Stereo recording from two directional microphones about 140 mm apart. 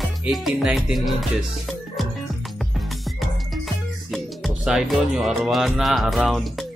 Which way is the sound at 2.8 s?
Centre (ahead or behind).